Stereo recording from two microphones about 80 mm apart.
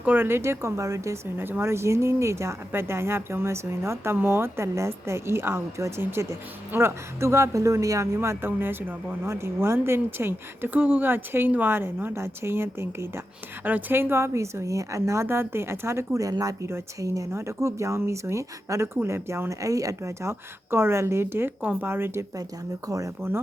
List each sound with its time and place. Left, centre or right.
0.0 s speech: right
1.4 s speech: right
13.7 s speech: right
16.3 s speech: right
16.6 s a woman's voice: right
22.9 s speech: right